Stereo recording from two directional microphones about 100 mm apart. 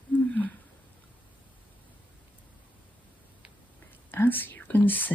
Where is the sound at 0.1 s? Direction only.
15° left (ahead or behind).